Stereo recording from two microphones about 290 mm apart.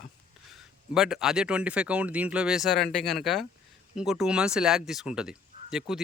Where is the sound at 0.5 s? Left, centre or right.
Centre.